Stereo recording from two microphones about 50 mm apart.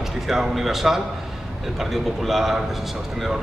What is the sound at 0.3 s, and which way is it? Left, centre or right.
A man's voice, centre.